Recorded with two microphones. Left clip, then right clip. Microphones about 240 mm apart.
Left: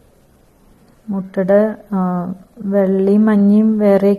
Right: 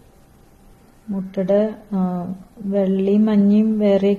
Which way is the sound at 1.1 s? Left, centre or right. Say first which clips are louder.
Left 5 dB; left.